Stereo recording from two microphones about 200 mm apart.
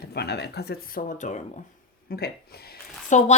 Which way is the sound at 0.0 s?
55° left (ahead or behind).